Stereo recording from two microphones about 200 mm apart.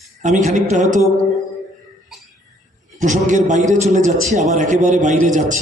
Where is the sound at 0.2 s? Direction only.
35° right (ahead or behind).